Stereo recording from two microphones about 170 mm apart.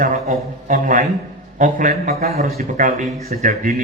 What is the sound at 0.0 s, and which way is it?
A man's voice, 50° right (ahead or behind).